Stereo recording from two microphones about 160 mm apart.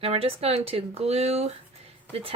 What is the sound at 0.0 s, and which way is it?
Speech, 35° right (ahead or behind).